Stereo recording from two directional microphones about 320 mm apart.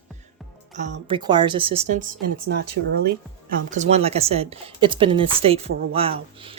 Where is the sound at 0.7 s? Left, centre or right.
Right.